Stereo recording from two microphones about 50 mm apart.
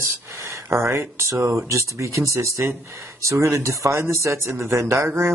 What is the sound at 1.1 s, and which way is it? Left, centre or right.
Speech, right.